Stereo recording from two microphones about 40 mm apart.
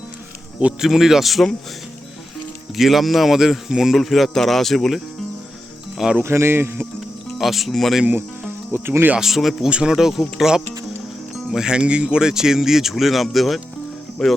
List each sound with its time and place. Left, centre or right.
0.9 s speech: centre
2.7 s speech: centre
3.9 s speech: centre
6.2 s speech: right
7.3 s speech: centre
7.7 s speech: centre
8.1 s speech: right
9.2 s speech: centre
9.6 s speech: right
9.9 s speech: centre